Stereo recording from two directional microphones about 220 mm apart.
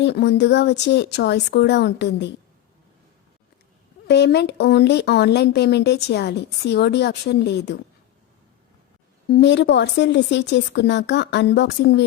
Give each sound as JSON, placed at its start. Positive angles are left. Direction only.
{"t": 0.0, "sound": "speech", "side_deg": 50}
{"t": 4.0, "sound": "speech", "side_deg": 50}
{"t": 9.3, "sound": "speech", "side_deg": 50}